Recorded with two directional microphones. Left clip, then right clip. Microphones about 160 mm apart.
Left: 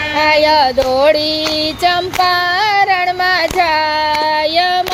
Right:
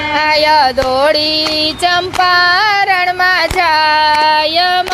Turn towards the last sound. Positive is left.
turn(degrees=15)  # may be behind; listen again after turning